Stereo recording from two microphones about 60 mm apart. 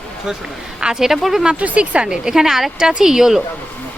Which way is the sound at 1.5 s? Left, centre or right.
Right.